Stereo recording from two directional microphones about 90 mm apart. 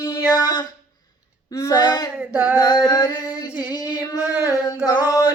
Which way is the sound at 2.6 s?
50° left (ahead or behind).